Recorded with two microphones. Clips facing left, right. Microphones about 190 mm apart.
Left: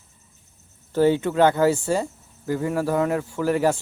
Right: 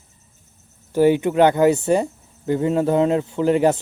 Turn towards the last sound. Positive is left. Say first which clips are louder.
# right 4 dB
turn(degrees=-20)  # may be behind; listen again after turning